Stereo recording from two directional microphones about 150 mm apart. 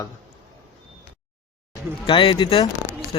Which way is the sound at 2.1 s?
35° left (ahead or behind).